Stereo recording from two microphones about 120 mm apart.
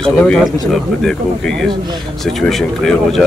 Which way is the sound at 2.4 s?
5° left (ahead or behind).